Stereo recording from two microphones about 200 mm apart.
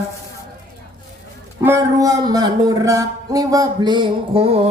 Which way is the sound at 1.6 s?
15° right (ahead or behind).